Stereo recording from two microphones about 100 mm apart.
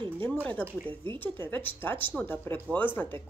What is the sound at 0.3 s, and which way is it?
Speech, 15° left (ahead or behind).